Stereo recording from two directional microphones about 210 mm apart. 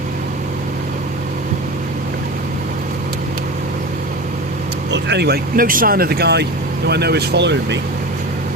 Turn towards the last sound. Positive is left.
turn(degrees=-55)  # may be behind; listen again after turning